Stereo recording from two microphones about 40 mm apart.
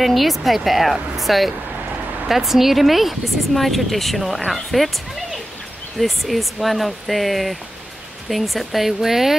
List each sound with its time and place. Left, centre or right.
0.0 s speech: centre